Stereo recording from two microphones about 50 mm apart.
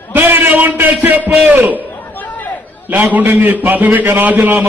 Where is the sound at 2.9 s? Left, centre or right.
Right.